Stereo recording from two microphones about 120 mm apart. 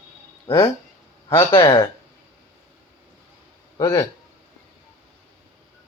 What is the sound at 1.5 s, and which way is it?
Speech, 35° left (ahead or behind).